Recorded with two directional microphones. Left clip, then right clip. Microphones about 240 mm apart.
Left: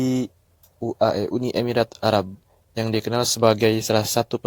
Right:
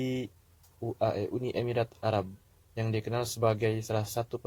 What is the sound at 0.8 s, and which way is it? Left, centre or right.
Speech, left.